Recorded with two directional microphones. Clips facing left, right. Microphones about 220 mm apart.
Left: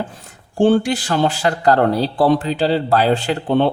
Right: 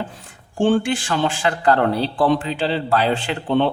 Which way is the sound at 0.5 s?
40° left (ahead or behind).